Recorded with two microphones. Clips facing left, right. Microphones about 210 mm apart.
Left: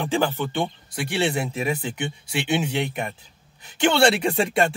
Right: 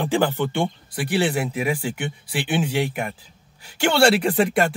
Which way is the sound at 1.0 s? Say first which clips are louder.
Right 2 dB; 25° left (ahead or behind).